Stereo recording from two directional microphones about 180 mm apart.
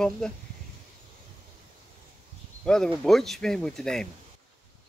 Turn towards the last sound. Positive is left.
turn(degrees=5)  # may be behind; listen again after turning